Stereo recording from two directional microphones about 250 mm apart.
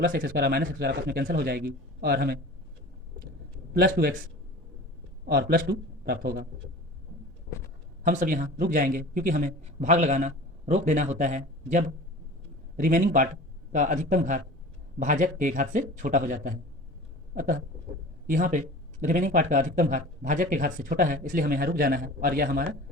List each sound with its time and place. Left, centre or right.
0.0 s speech: right
3.8 s speech: right
5.2 s a man's voice: right
8.0 s speech: right